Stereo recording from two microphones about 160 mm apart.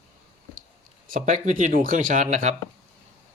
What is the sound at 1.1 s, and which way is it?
Speech, 55° right (ahead or behind).